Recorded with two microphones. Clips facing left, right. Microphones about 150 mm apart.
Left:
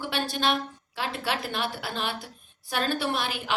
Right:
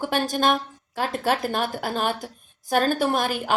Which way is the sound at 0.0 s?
45° right (ahead or behind).